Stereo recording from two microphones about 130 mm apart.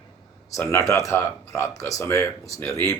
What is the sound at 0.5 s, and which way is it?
A man's voice, 20° left (ahead or behind).